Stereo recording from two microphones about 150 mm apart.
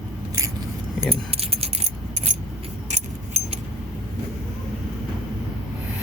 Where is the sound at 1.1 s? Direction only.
40° right (ahead or behind).